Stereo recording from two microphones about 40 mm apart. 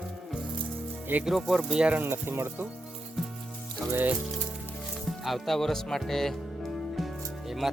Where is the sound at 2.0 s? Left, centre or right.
Right.